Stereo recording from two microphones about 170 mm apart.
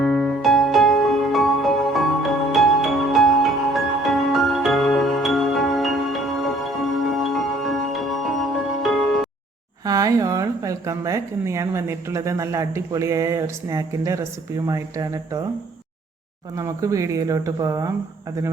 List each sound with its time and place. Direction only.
0.0 s music: centre (ahead or behind)
9.8 s speech: 20° right (ahead or behind)
16.6 s speech: 20° right (ahead or behind)